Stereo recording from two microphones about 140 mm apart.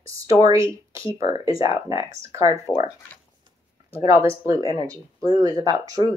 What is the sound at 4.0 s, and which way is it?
Speech, 20° right (ahead or behind).